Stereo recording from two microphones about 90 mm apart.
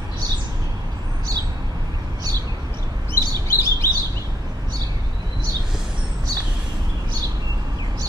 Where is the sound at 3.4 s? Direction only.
30° left (ahead or behind).